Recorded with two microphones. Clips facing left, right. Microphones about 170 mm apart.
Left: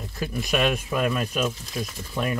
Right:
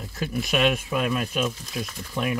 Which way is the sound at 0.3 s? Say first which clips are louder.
Right 1 dB; centre (ahead or behind).